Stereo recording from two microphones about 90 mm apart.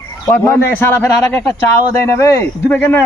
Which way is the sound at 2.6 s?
20° left (ahead or behind).